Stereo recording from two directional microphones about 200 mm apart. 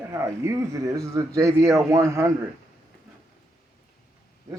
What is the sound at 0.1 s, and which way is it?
Speech, 15° right (ahead or behind).